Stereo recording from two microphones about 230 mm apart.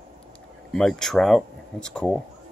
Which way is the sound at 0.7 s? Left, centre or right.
Centre.